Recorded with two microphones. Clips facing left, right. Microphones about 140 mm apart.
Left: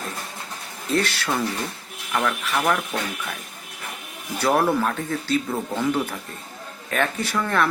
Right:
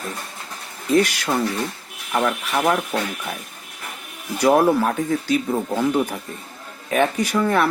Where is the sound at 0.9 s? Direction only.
15° right (ahead or behind).